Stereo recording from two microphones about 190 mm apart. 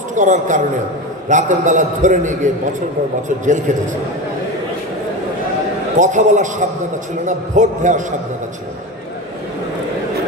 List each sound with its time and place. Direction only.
0.1 s a man's voice: 40° right (ahead or behind)
5.9 s a man's voice: 40° right (ahead or behind)